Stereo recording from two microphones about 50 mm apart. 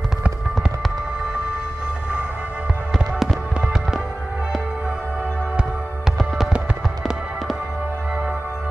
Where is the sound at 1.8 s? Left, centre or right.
Right.